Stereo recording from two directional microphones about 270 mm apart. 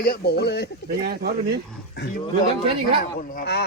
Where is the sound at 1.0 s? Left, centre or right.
Right.